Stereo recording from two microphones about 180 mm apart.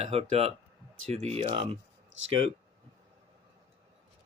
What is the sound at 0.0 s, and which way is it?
Speech, 35° right (ahead or behind).